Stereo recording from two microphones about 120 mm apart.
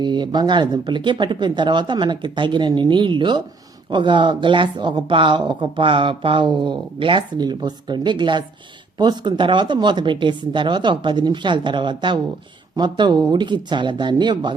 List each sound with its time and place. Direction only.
0.0 s speech: 40° right (ahead or behind)